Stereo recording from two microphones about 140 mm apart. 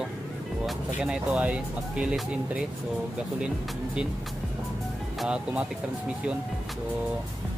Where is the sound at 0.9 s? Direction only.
5° right (ahead or behind).